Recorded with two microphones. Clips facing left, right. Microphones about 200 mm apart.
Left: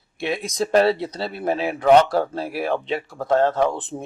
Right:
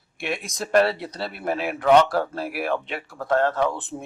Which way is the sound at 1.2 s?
25° left (ahead or behind).